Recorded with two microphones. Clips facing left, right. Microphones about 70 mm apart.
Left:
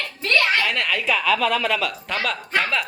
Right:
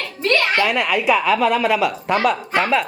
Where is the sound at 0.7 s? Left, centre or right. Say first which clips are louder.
Right 5 dB; centre.